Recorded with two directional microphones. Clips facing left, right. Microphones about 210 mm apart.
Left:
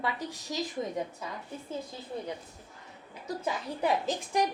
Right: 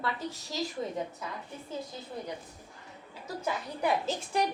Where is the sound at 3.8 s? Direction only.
15° left (ahead or behind).